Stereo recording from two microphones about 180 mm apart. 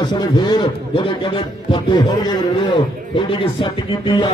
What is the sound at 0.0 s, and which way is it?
Speech, 25° left (ahead or behind).